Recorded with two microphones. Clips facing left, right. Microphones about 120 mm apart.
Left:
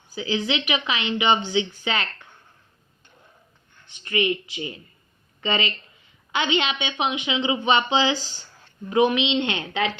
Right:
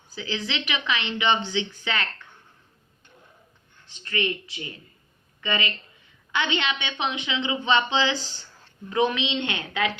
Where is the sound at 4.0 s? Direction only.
15° left (ahead or behind).